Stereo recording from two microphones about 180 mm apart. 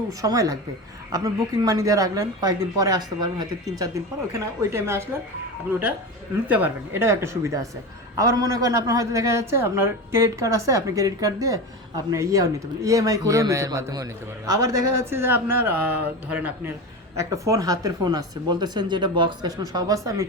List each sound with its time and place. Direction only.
0.2 s a woman's voice: 20° right (ahead or behind)
6.5 s a woman's voice: 10° right (ahead or behind)